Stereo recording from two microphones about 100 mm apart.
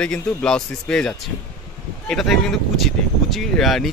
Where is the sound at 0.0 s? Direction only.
10° left (ahead or behind).